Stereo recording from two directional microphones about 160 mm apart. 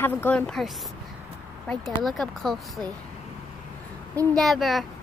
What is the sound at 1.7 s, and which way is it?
Speech, 10° left (ahead or behind).